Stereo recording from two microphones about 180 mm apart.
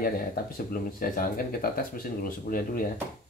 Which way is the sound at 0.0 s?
55° left (ahead or behind).